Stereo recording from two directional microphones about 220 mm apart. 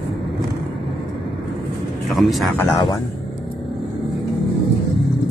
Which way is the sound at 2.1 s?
Centre (ahead or behind).